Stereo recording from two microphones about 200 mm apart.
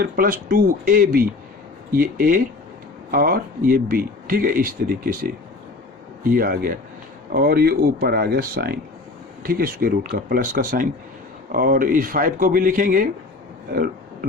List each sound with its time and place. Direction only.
0.0 s speech: 45° right (ahead or behind)
6.3 s speech: 45° right (ahead or behind)